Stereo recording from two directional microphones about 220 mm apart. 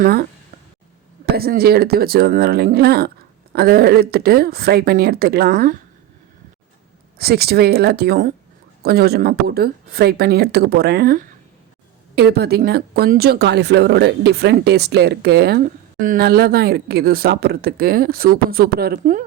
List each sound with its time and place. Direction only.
0.0 s speech: 45° right (ahead or behind)
1.4 s speech: 45° right (ahead or behind)
7.2 s speech: 45° right (ahead or behind)